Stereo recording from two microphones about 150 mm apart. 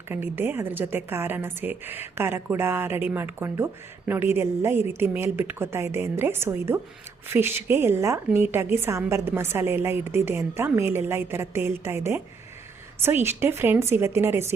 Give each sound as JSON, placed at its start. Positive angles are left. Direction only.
{"t": 0.1, "sound": "a woman's voice", "side_deg": -15}